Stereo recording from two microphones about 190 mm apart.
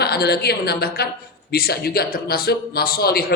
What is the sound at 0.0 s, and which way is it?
A man's voice, 60° left (ahead or behind).